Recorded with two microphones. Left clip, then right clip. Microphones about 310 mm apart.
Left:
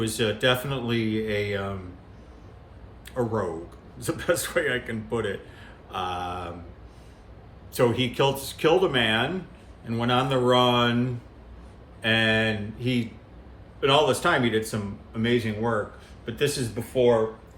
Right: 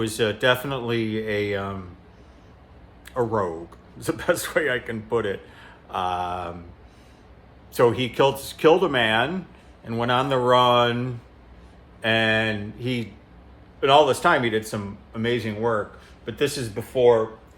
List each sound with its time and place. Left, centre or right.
0.0 s speech: centre
3.2 s a man's voice: centre
7.7 s a man's voice: centre